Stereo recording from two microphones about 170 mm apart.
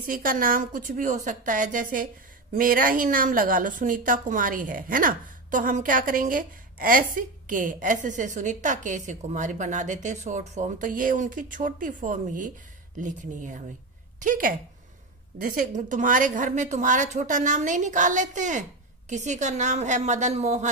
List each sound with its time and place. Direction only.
0.0 s a woman's voice: 55° right (ahead or behind)